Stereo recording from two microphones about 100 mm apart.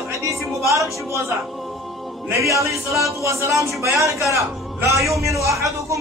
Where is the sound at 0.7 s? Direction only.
30° right (ahead or behind).